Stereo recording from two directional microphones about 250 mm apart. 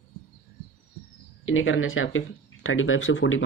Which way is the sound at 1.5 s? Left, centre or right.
Left.